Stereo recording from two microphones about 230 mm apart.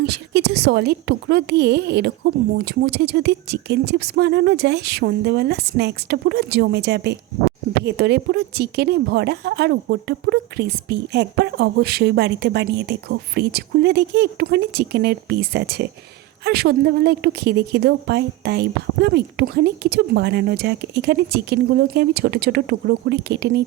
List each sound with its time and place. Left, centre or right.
0.0 s speech: right